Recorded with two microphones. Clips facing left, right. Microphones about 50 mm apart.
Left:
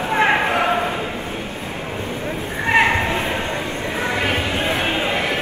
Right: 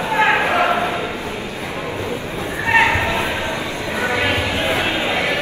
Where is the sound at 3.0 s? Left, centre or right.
Right.